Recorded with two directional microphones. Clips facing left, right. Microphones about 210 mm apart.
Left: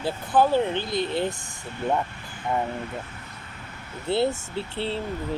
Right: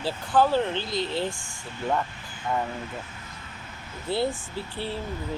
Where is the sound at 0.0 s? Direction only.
20° left (ahead or behind).